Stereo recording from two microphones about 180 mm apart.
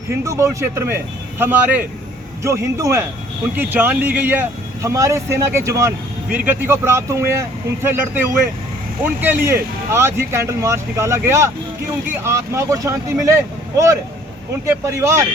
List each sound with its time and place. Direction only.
0.1 s speech: 15° right (ahead or behind)